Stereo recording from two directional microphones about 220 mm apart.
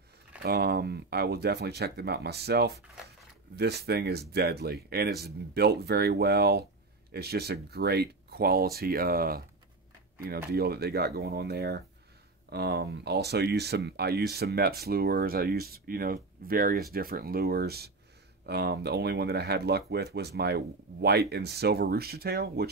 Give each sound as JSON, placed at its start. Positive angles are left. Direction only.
{"t": 0.4, "sound": "speech", "side_deg": -45}